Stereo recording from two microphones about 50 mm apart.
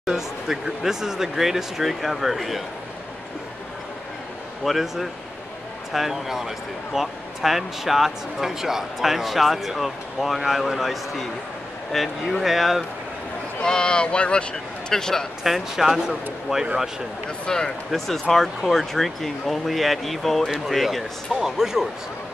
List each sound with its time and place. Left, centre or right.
0.0 s speech: centre
4.6 s speech: centre
13.6 s speech: centre
15.4 s speech: centre
17.5 s speech: centre